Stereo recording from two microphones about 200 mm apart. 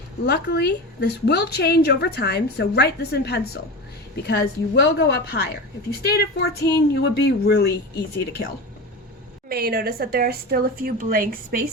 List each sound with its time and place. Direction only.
0.3 s a woman's voice: 55° left (ahead or behind)
9.5 s a woman's voice: 50° right (ahead or behind)